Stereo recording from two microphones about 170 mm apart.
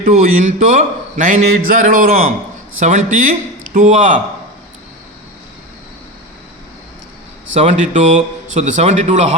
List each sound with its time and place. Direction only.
0.1 s a man's voice: 45° right (ahead or behind)
7.5 s a man's voice: 40° right (ahead or behind)